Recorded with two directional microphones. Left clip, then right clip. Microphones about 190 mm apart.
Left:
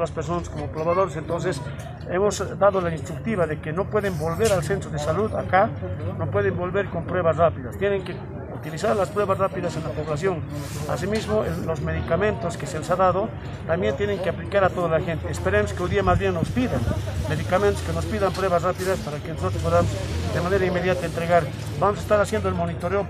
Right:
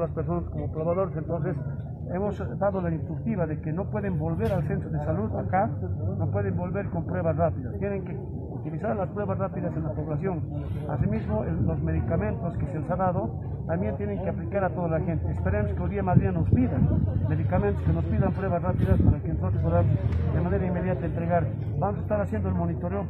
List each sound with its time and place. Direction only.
0.8 s speech: 10° left (ahead or behind)
2.1 s speech: 25° left (ahead or behind)
11.9 s speech: 25° left (ahead or behind)
20.4 s speech: 25° left (ahead or behind)